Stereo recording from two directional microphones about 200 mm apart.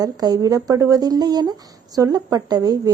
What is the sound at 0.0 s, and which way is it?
A woman's voice, 20° right (ahead or behind).